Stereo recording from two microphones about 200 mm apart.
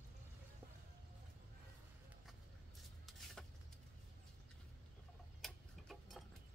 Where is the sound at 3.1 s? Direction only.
Centre (ahead or behind).